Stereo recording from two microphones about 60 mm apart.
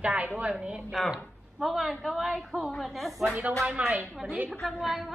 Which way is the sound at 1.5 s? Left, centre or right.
Centre.